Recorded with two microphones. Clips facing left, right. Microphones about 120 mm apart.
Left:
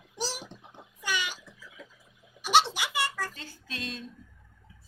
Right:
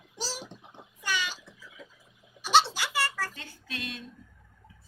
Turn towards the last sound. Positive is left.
turn(degrees=35)  # may be behind; listen again after turning